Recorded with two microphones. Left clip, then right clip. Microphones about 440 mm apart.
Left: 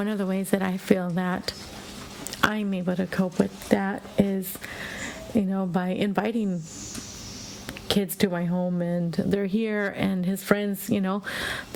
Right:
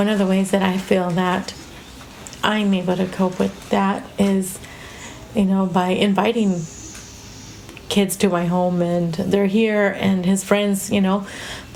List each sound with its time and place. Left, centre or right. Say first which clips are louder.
0.0 s speech: right 9 dB; left
5.4 s speech: right 9 dB; left
7.9 s speech: right 6 dB; left